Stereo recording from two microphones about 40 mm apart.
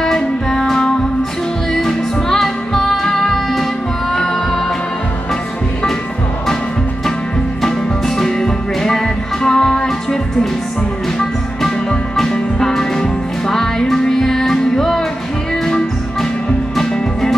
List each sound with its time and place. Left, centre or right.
0.0 s music: centre
8.2 s music: centre
11.1 s music: centre